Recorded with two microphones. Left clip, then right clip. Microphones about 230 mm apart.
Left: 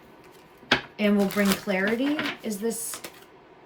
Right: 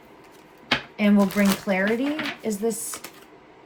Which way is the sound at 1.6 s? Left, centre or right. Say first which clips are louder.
Right 2 dB; right.